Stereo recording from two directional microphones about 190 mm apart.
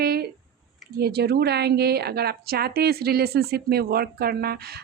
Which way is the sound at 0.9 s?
55° right (ahead or behind).